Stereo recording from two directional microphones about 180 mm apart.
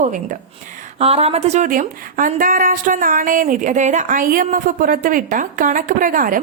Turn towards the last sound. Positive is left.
turn(degrees=-50)  # may be behind; listen again after turning